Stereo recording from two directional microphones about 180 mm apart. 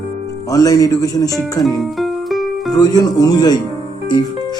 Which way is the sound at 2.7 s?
20° left (ahead or behind).